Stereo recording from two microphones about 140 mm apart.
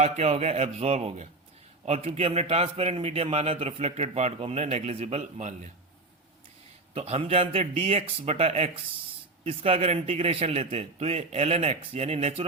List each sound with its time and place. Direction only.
0.0 s a man's voice: 50° right (ahead or behind)
6.9 s a man's voice: 45° right (ahead or behind)